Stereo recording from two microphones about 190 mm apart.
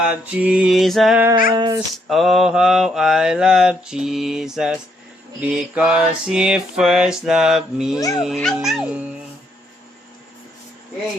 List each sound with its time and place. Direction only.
0.0 s mantra: 5° right (ahead or behind)
1.5 s speech: 20° right (ahead or behind)
2.0 s mantra: centre (ahead or behind)
7.9 s speech: 20° left (ahead or behind)
8.2 s mantra: centre (ahead or behind)